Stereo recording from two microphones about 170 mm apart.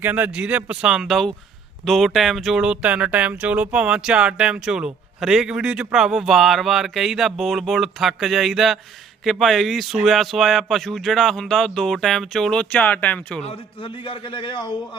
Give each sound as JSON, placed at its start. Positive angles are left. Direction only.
{"t": 0.0, "sound": "speech", "side_deg": -10}
{"t": 13.4, "sound": "a man's voice", "side_deg": 35}